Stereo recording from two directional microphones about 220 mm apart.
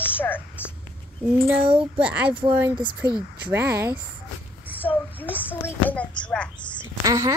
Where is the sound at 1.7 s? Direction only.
25° right (ahead or behind).